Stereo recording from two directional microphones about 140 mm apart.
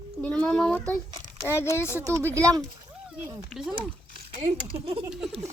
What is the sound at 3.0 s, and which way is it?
Speech, 5° right (ahead or behind).